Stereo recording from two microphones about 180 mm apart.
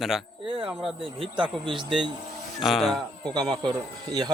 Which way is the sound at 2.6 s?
Centre (ahead or behind).